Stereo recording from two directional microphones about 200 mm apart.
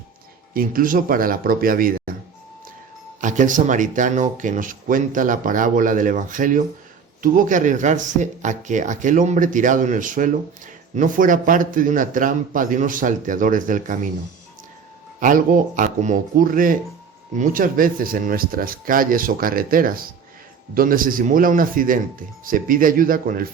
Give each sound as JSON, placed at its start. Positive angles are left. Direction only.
{"t": 0.5, "sound": "speech", "side_deg": -45}
{"t": 3.2, "sound": "speech", "side_deg": -40}
{"t": 15.2, "sound": "speech", "side_deg": -40}